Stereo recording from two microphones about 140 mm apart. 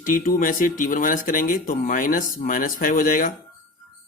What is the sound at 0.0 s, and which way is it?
A man's voice, 75° left (ahead or behind).